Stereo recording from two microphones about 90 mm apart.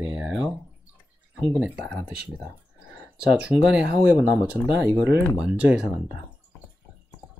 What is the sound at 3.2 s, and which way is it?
Speech, 10° right (ahead or behind).